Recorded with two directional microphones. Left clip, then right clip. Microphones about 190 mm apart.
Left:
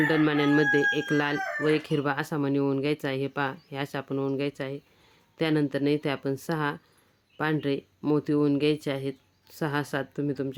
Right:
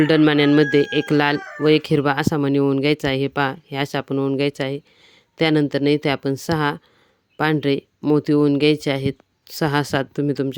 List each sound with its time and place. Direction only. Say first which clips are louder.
0.0 s speech: right 8 dB; 45° right (ahead or behind)